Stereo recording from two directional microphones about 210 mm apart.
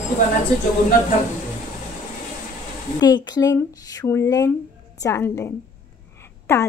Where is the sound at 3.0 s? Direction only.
20° left (ahead or behind).